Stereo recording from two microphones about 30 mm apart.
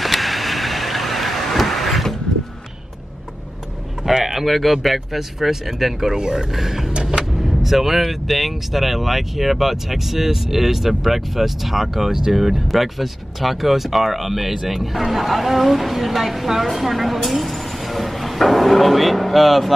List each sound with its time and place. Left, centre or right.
0.0 s vehicle: centre
4.1 s a sound: centre
4.5 s speech: centre
6.1 s speech: right
6.5 s speech: centre
6.9 s vehicle: right
7.4 s speech: centre